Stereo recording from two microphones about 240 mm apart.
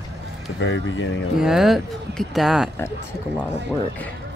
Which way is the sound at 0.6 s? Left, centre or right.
Left.